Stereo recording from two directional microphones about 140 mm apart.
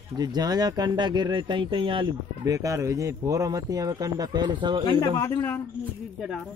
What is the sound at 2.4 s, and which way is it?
Speech, 25° right (ahead or behind).